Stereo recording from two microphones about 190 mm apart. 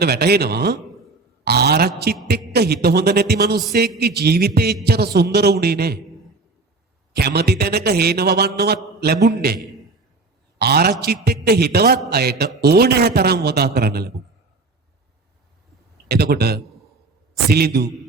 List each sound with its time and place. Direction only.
0.0 s a man's voice: 55° right (ahead or behind)
7.2 s a man's voice: 55° right (ahead or behind)
10.6 s a man's voice: 55° right (ahead or behind)
16.0 s a man's voice: 60° right (ahead or behind)